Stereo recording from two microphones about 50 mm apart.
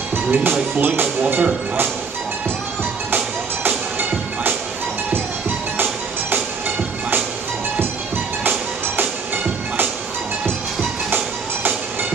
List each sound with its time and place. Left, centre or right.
0.1 s speech: right
3.1 s music: right
8.5 s music: right
11.1 s music: right